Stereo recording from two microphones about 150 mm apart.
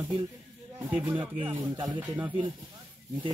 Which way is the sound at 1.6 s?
25° right (ahead or behind).